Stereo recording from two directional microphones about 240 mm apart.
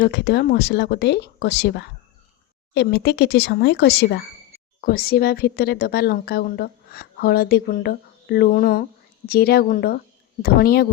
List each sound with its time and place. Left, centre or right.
0.0 s speech: left